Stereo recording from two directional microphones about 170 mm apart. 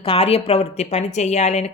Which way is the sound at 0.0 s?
35° left (ahead or behind).